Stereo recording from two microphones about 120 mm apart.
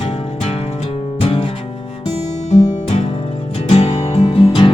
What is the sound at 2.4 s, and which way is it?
Music, 70° left (ahead or behind).